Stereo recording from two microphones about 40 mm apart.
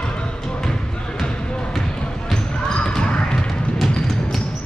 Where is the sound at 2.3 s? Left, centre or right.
Left.